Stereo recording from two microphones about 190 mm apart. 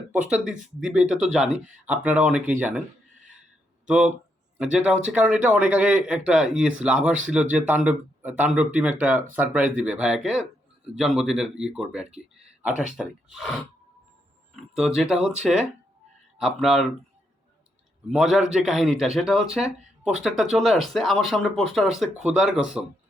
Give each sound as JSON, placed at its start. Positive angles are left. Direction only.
{"t": 0.3, "sound": "a man's voice", "side_deg": -5}
{"t": 3.8, "sound": "a man's voice", "side_deg": -5}
{"t": 18.1, "sound": "a man's voice", "side_deg": 0}